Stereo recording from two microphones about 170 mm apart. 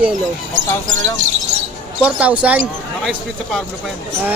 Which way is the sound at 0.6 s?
45° right (ahead or behind).